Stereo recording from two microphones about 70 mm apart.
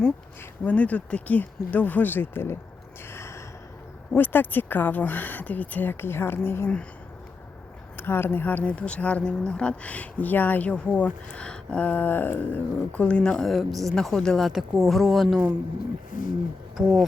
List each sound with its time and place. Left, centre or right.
0.6 s speech: left
3.1 s gasp: left
4.1 s speech: left
7.9 s speech: left; by 15.4 s centre
16.7 s speech: centre